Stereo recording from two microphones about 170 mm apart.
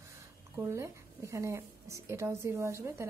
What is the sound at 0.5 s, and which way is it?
Speech, 15° right (ahead or behind).